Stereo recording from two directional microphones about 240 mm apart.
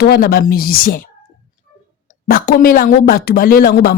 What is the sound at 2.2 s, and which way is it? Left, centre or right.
A woman's voice, left.